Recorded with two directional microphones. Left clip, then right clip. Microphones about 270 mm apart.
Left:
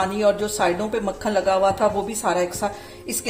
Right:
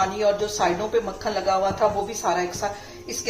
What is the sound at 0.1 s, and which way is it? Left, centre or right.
Speech, left.